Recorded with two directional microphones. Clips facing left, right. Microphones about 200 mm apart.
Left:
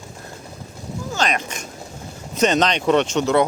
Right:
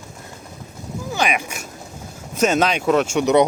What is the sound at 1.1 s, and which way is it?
Speech, 10° right (ahead or behind).